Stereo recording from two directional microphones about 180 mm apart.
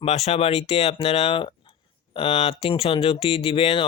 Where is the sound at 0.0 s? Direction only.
35° left (ahead or behind).